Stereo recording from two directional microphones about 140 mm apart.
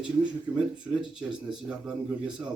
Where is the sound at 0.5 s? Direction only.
5° right (ahead or behind).